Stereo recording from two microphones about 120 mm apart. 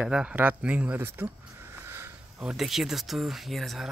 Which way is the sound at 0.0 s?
10° right (ahead or behind).